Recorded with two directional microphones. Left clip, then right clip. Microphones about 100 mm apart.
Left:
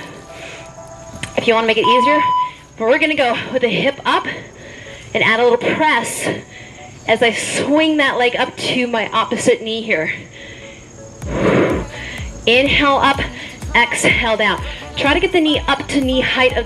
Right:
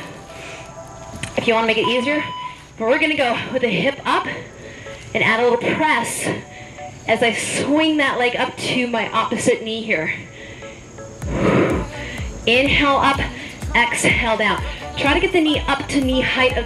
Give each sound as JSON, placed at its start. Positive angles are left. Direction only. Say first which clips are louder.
{"t": 1.2, "sound": "a woman's voice", "louder": "left 3 dB", "side_deg": 25}
{"t": 11.2, "sound": "music", "louder": "left 3 dB", "side_deg": 20}
{"t": 14.7, "sound": "a woman's voice", "louder": "left 2 dB", "side_deg": 25}